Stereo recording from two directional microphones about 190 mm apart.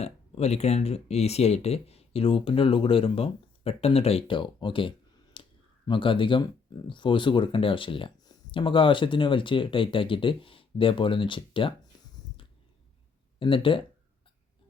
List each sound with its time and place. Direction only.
0.0 s speech: 35° left (ahead or behind)
13.4 s speech: 25° left (ahead or behind)